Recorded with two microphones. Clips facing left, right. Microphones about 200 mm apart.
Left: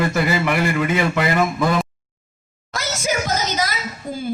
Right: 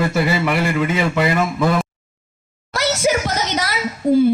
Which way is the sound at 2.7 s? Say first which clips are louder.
Right 5 dB; 70° right (ahead or behind).